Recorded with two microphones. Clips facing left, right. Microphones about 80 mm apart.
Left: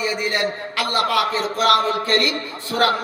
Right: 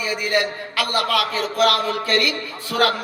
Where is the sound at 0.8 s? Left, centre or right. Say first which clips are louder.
Left 1 dB; left.